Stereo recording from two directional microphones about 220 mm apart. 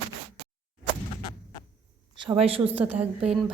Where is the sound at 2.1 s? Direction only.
25° right (ahead or behind).